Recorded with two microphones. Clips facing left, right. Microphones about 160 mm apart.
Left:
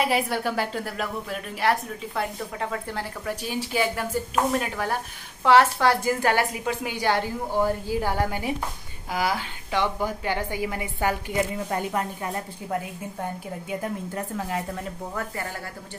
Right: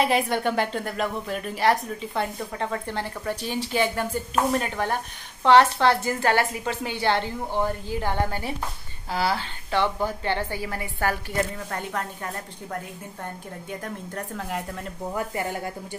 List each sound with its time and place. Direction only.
0.0 s a woman's voice: 5° left (ahead or behind)
13.2 s a woman's voice: 10° left (ahead or behind)
15.1 s speech: 20° right (ahead or behind)